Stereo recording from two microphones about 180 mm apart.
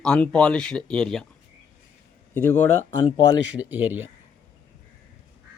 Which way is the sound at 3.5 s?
10° right (ahead or behind).